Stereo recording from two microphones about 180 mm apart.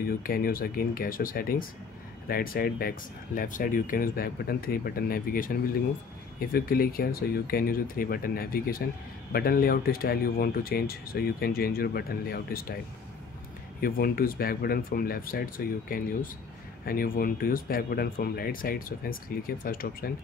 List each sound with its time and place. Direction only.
0.0 s speech: 55° left (ahead or behind)
13.7 s speech: 55° left (ahead or behind)